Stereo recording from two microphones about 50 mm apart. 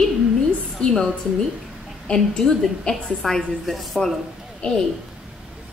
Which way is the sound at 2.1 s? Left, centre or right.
Left.